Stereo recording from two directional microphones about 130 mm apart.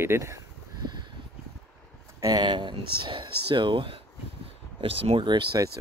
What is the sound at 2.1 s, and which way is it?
Speech, 30° right (ahead or behind).